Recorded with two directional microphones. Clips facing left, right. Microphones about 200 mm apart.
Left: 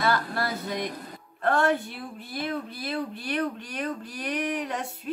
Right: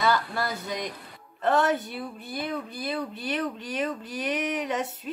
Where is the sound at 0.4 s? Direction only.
Centre (ahead or behind).